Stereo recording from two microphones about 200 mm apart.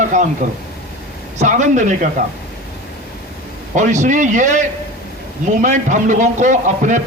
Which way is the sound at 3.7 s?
35° right (ahead or behind).